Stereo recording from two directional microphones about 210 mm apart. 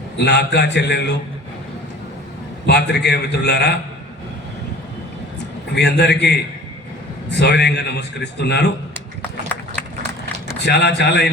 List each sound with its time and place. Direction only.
0.2 s a man's voice: 55° left (ahead or behind)
2.6 s a man's voice: 55° left (ahead or behind)
5.7 s a man's voice: 55° left (ahead or behind)
10.6 s a man's voice: 55° left (ahead or behind)